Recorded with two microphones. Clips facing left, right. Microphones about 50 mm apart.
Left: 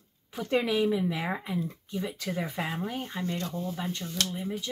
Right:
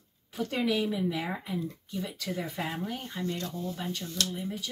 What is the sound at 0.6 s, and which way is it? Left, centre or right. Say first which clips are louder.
Speech: left 3 dB; centre.